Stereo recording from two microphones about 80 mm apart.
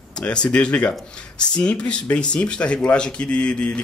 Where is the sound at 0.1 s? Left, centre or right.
Centre.